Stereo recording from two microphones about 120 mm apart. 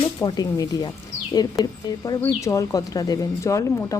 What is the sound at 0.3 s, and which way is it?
A woman's voice, 30° left (ahead or behind).